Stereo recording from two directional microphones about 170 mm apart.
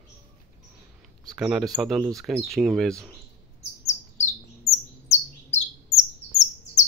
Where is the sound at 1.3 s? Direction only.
5° right (ahead or behind).